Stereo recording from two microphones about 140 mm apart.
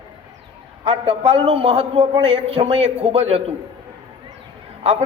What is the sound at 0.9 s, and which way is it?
A man's voice, 45° right (ahead or behind).